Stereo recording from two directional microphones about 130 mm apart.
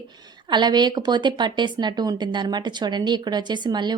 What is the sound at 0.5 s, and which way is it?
Speech, 35° right (ahead or behind).